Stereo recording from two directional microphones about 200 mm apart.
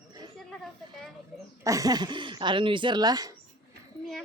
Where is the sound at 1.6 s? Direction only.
15° right (ahead or behind).